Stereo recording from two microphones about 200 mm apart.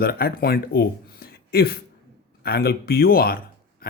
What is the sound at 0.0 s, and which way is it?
Speech, 50° left (ahead or behind).